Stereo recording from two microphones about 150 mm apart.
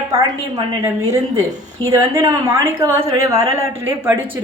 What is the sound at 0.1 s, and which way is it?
Speech, 25° right (ahead or behind).